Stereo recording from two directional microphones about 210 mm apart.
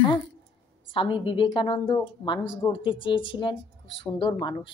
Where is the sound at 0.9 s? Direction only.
25° left (ahead or behind).